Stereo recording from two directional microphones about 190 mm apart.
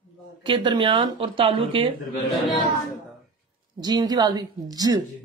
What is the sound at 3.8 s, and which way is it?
Speech, 20° right (ahead or behind).